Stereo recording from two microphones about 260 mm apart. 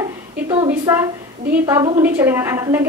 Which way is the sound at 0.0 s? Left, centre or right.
Centre.